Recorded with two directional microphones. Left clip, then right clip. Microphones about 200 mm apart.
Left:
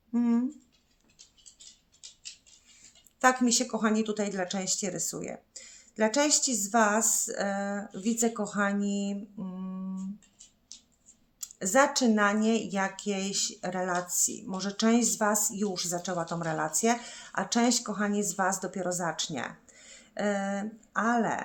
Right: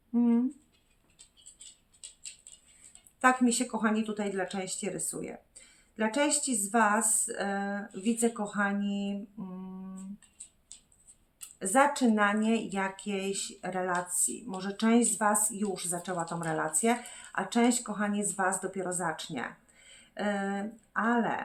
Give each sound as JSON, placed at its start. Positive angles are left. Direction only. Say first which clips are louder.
{"t": 0.1, "sound": "a sound", "louder": "right 1 dB", "side_deg": 35}
{"t": 3.2, "sound": "speech", "louder": "left 1 dB", "side_deg": 40}
{"t": 11.3, "sound": "speech", "louder": "left 1 dB", "side_deg": 40}